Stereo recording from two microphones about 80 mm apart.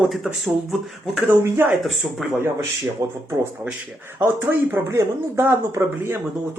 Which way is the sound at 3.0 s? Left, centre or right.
Right.